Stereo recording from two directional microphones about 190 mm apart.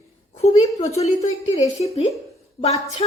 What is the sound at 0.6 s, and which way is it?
A woman's voice, 35° left (ahead or behind).